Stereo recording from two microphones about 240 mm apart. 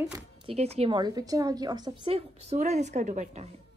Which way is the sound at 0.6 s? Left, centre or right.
Right.